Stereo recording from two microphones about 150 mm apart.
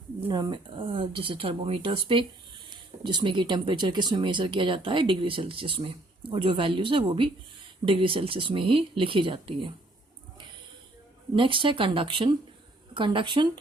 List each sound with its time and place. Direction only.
0.3 s speech: 30° right (ahead or behind)
11.3 s speech: 35° right (ahead or behind)